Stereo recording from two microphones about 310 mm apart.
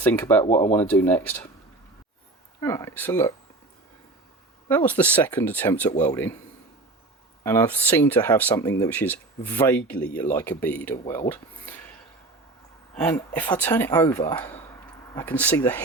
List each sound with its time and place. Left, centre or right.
0.0 s speech: centre
2.6 s speech: centre
4.7 s speech: centre
7.4 s speech: centre
12.9 s speech: centre